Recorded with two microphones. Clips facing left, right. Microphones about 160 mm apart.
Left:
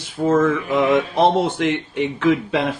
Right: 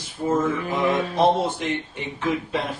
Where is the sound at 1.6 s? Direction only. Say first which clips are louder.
Left 7 dB; 90° left.